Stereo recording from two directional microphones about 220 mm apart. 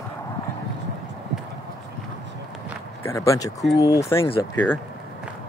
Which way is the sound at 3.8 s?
15° left (ahead or behind).